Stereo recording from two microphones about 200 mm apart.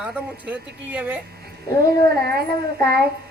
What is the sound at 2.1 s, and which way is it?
A child's voice, 50° right (ahead or behind).